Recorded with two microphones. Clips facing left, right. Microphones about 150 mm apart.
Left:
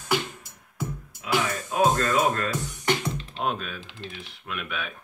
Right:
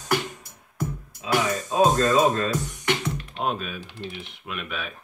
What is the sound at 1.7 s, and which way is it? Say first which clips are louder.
Speech: right 3 dB; 20° right (ahead or behind).